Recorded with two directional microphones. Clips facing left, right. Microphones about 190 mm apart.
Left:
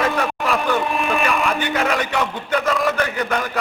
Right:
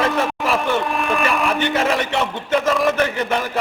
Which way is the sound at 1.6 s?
25° right (ahead or behind).